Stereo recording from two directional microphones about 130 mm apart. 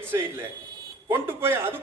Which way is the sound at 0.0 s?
15° right (ahead or behind).